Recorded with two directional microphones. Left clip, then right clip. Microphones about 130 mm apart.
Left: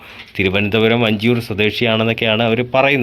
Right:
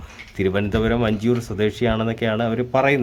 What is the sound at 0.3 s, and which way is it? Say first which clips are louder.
Speech: left 6 dB; 15° left (ahead or behind).